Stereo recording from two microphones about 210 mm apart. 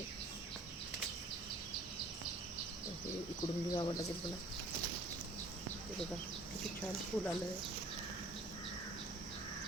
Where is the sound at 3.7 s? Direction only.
20° left (ahead or behind).